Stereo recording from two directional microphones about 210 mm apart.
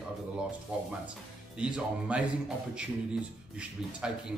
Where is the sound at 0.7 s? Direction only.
5° right (ahead or behind).